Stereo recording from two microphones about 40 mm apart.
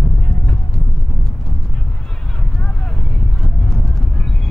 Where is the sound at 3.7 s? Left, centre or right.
Centre.